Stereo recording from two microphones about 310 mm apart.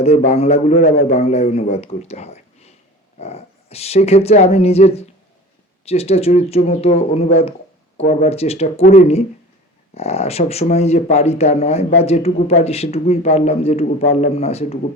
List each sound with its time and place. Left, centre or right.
0.0 s speech: centre